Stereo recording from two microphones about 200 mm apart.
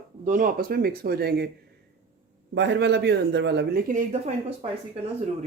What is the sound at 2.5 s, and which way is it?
Speech, 60° right (ahead or behind).